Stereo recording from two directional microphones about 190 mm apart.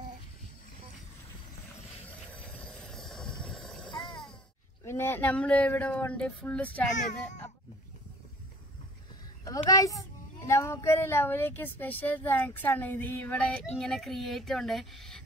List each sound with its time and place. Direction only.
2.5 s vehicle: 5° left (ahead or behind)
3.9 s groan: 25° left (ahead or behind)
4.8 s a child's voice: 10° left (ahead or behind)
9.4 s a child's voice: 20° left (ahead or behind); by 15.2 s centre (ahead or behind)